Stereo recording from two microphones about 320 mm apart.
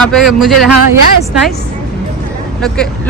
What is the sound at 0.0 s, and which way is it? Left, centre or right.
Speech, centre.